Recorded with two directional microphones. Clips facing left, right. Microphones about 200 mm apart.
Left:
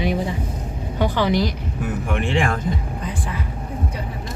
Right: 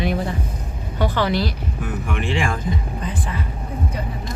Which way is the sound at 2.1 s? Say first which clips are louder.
Left 2 dB; 55° left (ahead or behind).